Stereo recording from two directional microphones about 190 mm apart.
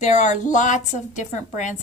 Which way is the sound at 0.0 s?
40° left (ahead or behind).